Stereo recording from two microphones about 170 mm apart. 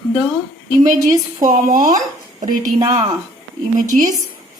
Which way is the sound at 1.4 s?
50° right (ahead or behind).